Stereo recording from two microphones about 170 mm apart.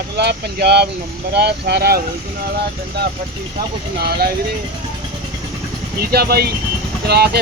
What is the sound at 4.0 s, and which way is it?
Speech, 65° right (ahead or behind).